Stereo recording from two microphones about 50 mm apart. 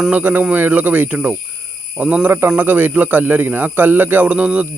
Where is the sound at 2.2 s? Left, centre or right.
Right.